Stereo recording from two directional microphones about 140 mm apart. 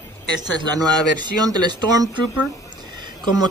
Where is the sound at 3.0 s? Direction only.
35° right (ahead or behind).